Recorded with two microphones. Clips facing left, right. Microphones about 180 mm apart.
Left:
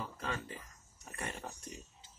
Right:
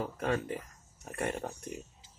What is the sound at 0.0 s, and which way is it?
Speech, 55° right (ahead or behind).